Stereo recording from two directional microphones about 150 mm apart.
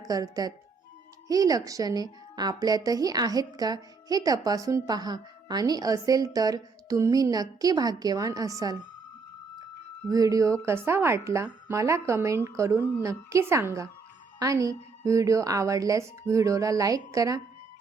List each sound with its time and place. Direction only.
0.0 s a woman's voice: 25° right (ahead or behind)
10.1 s a woman's voice: 25° right (ahead or behind)